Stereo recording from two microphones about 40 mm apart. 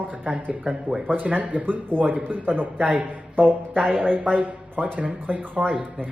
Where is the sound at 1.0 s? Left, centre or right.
Right.